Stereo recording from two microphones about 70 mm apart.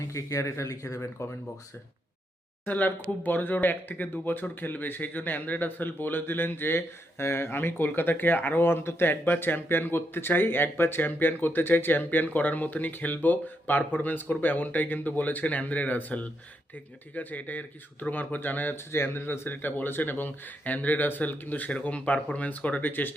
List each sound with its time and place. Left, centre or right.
0.1 s speech: left
2.6 s speech: left